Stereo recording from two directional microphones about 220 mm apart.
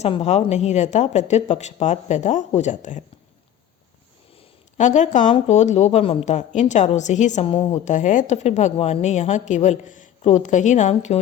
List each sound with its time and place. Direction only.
0.0 s speech: 30° left (ahead or behind)
4.4 s speech: 35° left (ahead or behind)